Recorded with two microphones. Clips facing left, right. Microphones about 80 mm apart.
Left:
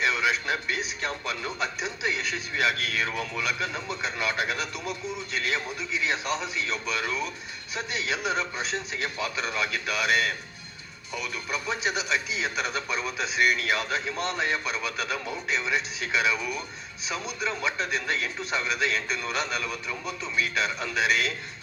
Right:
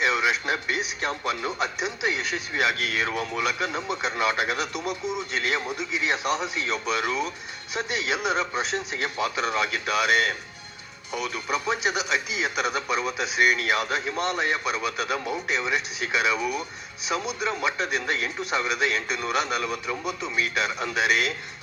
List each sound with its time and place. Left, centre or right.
0.0 s speech: centre